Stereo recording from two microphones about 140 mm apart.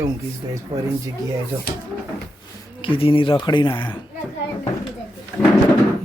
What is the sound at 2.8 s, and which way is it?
Speech, 40° left (ahead or behind).